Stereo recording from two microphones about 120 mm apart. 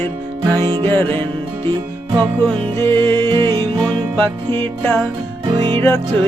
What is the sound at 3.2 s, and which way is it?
Music, 45° right (ahead or behind).